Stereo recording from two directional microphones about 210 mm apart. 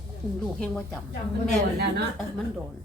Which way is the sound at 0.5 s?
5° left (ahead or behind).